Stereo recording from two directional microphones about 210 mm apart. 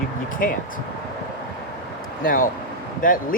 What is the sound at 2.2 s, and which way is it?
Speech, 40° left (ahead or behind).